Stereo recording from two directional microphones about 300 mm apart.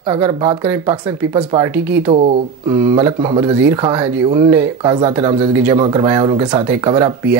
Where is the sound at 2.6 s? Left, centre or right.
Centre.